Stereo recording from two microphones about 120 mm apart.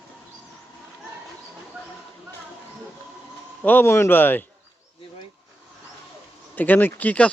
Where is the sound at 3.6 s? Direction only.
15° left (ahead or behind).